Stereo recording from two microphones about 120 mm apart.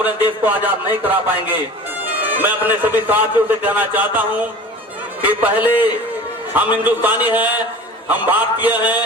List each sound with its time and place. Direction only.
0.0 s a man's voice: 15° right (ahead or behind)
2.4 s a man's voice: 15° right (ahead or behind)
5.2 s a man's voice: 15° right (ahead or behind)